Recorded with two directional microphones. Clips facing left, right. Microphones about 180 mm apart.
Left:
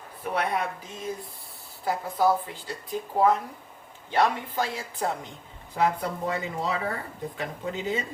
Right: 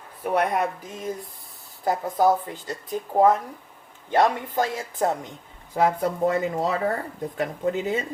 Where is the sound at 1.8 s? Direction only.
45° right (ahead or behind).